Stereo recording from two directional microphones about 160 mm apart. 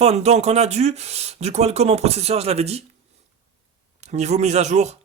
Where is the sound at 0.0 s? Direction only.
40° right (ahead or behind).